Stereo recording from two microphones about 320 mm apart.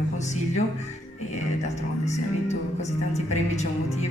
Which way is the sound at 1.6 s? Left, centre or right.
Left.